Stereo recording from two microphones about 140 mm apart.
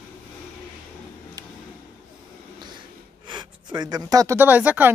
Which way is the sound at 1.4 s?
30° right (ahead or behind).